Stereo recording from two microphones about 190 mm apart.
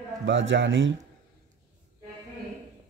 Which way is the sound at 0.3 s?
75° right (ahead or behind).